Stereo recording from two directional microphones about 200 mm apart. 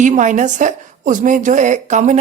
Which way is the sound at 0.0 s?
40° right (ahead or behind).